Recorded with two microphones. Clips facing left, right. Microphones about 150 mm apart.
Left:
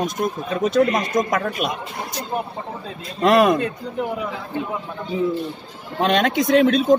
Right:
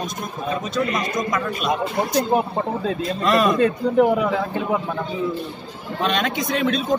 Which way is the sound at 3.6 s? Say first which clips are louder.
Right 8 dB; 70° right (ahead or behind).